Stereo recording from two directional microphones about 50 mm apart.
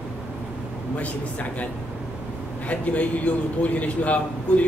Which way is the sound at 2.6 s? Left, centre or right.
Left.